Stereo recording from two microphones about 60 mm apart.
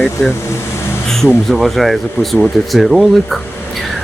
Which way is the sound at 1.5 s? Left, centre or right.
Centre.